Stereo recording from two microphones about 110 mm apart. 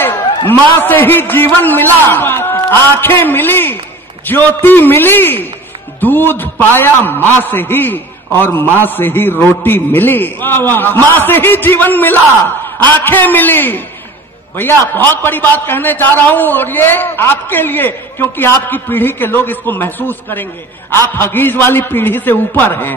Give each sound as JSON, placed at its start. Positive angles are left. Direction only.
{"t": 0.5, "sound": "a man's voice", "side_deg": 20}